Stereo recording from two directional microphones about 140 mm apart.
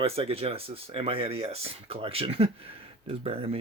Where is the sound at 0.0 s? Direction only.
45° right (ahead or behind).